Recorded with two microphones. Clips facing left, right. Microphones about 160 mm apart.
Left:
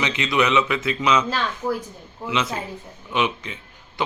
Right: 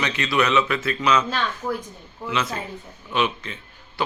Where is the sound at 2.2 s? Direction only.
20° left (ahead or behind).